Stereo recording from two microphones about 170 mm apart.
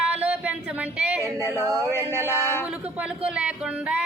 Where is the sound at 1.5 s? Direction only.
20° right (ahead or behind).